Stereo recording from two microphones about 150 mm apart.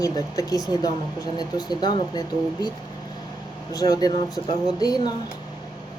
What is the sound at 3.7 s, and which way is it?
Speech, 25° left (ahead or behind).